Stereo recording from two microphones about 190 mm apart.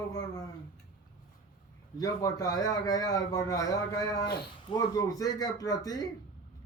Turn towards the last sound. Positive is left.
turn(degrees=20)  # may be behind; listen again after turning